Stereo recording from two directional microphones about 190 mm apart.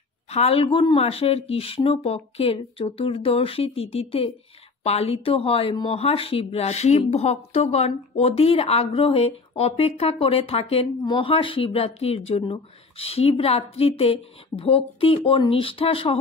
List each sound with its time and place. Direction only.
0.3 s speech: 30° left (ahead or behind)